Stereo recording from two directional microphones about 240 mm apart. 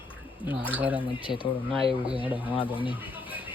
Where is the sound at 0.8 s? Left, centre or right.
Centre.